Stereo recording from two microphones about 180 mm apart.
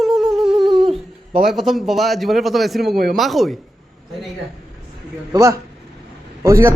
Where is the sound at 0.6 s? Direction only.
25° right (ahead or behind).